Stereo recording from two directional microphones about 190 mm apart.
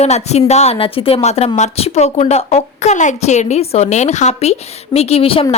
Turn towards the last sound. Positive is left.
turn(degrees=30)  # may be behind; listen again after turning